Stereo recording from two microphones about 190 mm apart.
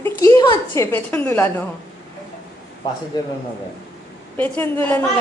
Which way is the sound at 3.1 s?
20° left (ahead or behind).